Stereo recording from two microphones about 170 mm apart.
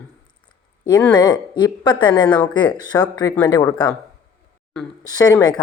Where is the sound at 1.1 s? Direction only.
25° left (ahead or behind).